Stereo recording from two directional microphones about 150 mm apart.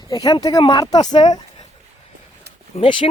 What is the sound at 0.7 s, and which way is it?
Speech, 25° left (ahead or behind).